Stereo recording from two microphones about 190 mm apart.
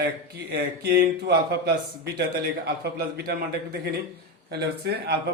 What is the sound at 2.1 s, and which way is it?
A man's voice, 55° right (ahead or behind).